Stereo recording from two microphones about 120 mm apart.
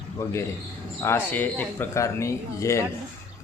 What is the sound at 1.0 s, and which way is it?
Speech, 15° left (ahead or behind).